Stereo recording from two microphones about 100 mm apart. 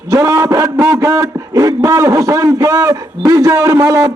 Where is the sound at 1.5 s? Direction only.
35° right (ahead or behind).